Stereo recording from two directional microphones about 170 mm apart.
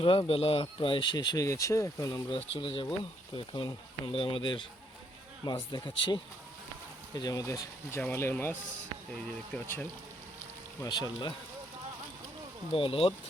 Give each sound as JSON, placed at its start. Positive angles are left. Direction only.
{"t": 0.0, "sound": "speech", "side_deg": 30}
{"t": 2.6, "sound": "speech", "side_deg": 30}
{"t": 10.8, "sound": "speech", "side_deg": 25}
{"t": 12.7, "sound": "speech", "side_deg": 30}